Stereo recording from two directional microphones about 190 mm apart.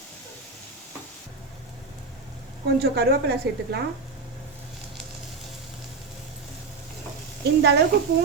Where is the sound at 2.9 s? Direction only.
55° right (ahead or behind).